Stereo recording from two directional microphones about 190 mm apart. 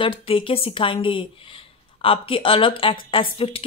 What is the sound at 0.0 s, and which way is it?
A woman's voice, 25° left (ahead or behind).